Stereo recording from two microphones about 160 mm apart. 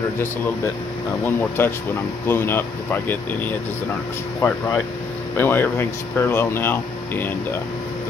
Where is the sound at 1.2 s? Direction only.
15° left (ahead or behind).